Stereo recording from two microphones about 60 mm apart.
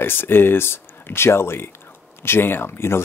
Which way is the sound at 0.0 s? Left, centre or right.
Left.